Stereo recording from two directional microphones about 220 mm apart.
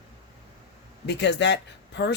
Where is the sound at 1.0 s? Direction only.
50° left (ahead or behind).